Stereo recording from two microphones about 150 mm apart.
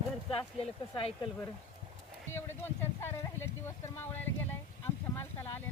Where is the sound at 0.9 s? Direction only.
35° left (ahead or behind).